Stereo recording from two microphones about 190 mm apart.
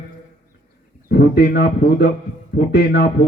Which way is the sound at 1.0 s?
60° left (ahead or behind).